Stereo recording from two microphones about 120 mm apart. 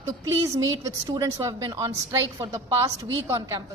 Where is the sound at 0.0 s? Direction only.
25° right (ahead or behind).